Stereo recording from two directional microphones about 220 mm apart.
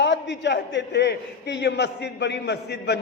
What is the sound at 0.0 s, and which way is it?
A man's voice, 55° left (ahead or behind).